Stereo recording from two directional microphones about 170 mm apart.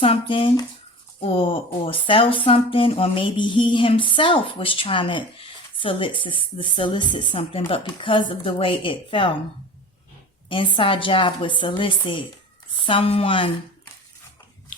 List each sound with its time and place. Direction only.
0.0 s a woman's voice: 30° left (ahead or behind)
10.5 s speech: 30° left (ahead or behind)